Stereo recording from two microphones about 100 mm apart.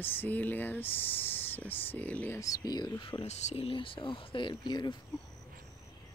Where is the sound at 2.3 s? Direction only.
40° left (ahead or behind).